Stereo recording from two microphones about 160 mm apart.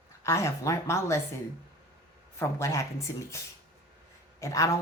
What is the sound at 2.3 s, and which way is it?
Speech, 20° left (ahead or behind).